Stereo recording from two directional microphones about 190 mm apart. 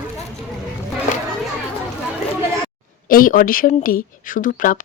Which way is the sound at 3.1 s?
50° left (ahead or behind).